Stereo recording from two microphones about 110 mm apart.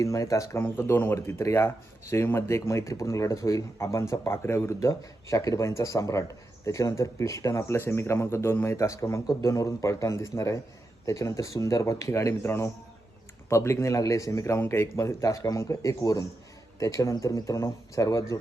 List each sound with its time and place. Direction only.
0.0 s speech: 30° left (ahead or behind)